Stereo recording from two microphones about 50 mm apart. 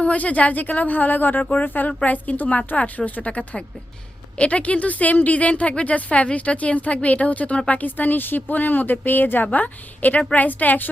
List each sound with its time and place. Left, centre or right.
0.0 s speech: left